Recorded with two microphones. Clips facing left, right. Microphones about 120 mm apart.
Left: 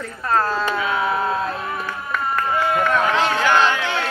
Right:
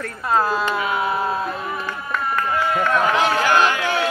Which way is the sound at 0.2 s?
10° right (ahead or behind).